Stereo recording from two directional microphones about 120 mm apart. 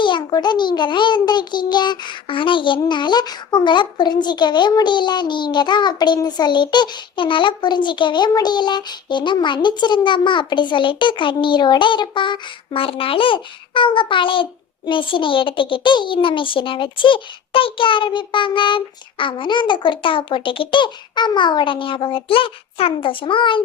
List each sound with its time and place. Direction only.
0.0 s a child's voice: 40° left (ahead or behind)